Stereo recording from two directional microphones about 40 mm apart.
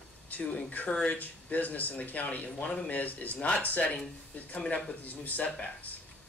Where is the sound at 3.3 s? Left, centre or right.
Left.